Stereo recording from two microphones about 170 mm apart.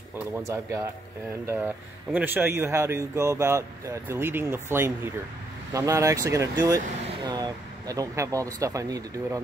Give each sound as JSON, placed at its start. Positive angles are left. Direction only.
{"t": 0.4, "sound": "speech", "side_deg": -20}